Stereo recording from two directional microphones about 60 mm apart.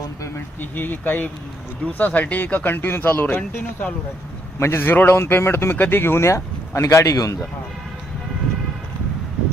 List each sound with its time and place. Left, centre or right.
0.3 s speech: left